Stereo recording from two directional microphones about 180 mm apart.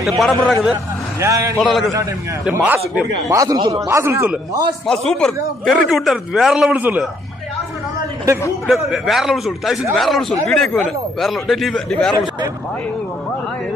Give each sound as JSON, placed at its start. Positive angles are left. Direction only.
{"t": 0.2, "sound": "a man's voice", "side_deg": 0}
{"t": 1.2, "sound": "a man's voice", "side_deg": -15}
{"t": 1.6, "sound": "a man's voice", "side_deg": 0}
{"t": 3.3, "sound": "a man's voice", "side_deg": -20}
{"t": 4.8, "sound": "a man's voice", "side_deg": 5}
{"t": 8.6, "sound": "a man's voice", "side_deg": 0}